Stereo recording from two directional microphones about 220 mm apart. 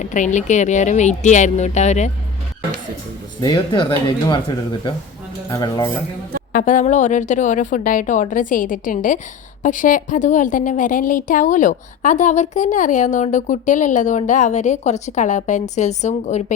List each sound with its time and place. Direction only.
0.0 s a woman's voice: 35° left (ahead or behind)
3.4 s speech: 20° left (ahead or behind)
5.5 s speech: 15° left (ahead or behind)
6.5 s a woman's voice: 35° left (ahead or behind)